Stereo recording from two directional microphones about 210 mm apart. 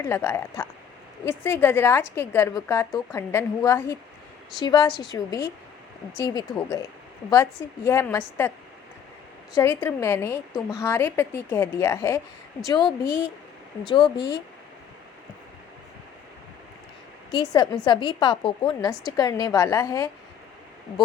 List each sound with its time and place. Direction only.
0.0 s a woman's voice: 10° left (ahead or behind)
7.9 s a woman's voice: 10° left (ahead or behind)
9.6 s a woman's voice: 10° left (ahead or behind)
17.3 s a woman's voice: 20° left (ahead or behind)